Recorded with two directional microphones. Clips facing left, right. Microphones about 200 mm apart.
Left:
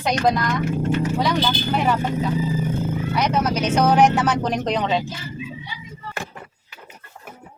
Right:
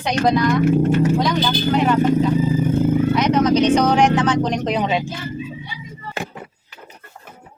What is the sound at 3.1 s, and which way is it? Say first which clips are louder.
Speech: right 6 dB; 10° left (ahead or behind).